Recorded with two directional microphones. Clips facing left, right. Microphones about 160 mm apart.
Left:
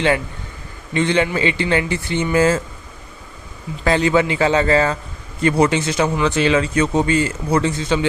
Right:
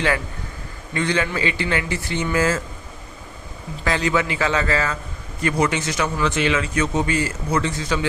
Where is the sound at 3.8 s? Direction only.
30° left (ahead or behind).